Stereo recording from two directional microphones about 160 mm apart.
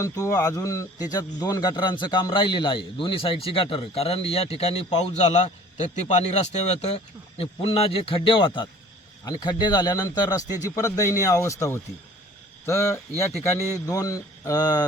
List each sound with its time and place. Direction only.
0.0 s speech: 20° left (ahead or behind)